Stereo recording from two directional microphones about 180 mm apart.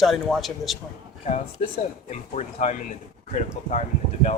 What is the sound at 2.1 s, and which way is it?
Speech, 40° left (ahead or behind).